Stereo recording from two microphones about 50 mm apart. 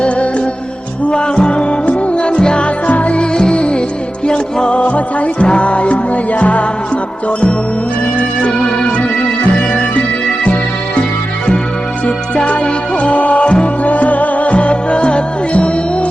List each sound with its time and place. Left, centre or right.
0.0 s music: left
8.4 s music: centre
12.0 s music: left